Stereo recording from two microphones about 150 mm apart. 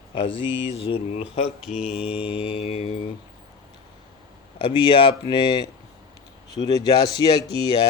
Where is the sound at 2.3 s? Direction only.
40° left (ahead or behind).